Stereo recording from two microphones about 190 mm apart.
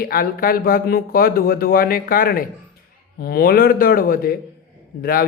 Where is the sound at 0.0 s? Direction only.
50° left (ahead or behind).